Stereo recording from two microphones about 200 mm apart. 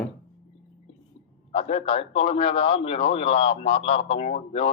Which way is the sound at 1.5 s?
30° left (ahead or behind).